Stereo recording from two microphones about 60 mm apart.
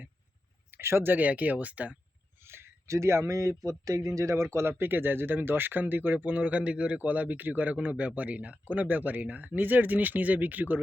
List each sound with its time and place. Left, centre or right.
0.7 s speech: right
1.1 s speech: right
2.4 s a sound: right
3.6 s speech: right
4.8 s speech: right